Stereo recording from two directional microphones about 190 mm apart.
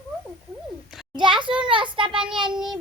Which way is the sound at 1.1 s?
25° right (ahead or behind).